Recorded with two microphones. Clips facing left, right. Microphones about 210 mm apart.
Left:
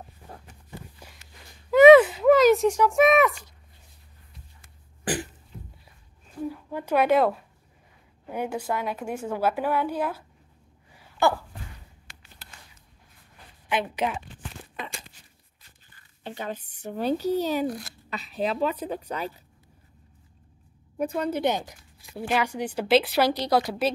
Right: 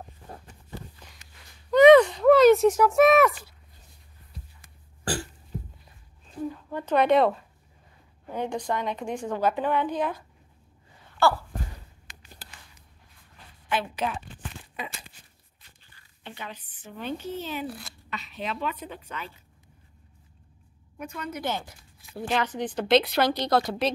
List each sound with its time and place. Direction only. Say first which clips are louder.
0.5 s a sound: right 2 dB; 15° left (ahead or behind); by 3.5 s centre (ahead or behind)
5.0 s cough: left 2 dB; 20° left (ahead or behind)
6.4 s speech: even; 10° left (ahead or behind)
11.2 s speech: even; 15° left (ahead or behind)
12.1 s a sound: right 2 dB; 15° right (ahead or behind)
13.7 s speech: left 2 dB; 20° left (ahead or behind)
16.3 s a woman's voice: left 7 dB; 45° left (ahead or behind)
21.0 s a woman's voice: left 9 dB; 35° left (ahead or behind)
21.5 s speech: left 5 dB; 15° left (ahead or behind)